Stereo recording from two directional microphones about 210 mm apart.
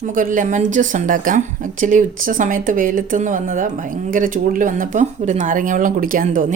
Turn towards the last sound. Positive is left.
turn(degrees=-35)  # may be behind; listen again after turning